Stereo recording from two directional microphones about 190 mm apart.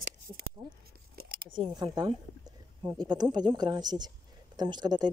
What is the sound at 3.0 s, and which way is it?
Speech, 20° right (ahead or behind).